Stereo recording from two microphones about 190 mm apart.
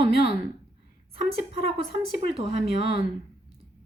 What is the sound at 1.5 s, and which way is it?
A woman's voice, 30° right (ahead or behind).